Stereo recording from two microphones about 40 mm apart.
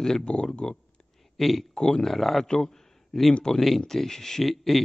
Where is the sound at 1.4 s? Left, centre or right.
Centre.